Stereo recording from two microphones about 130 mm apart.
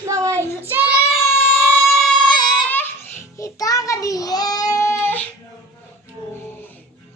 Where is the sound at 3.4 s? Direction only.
25° left (ahead or behind).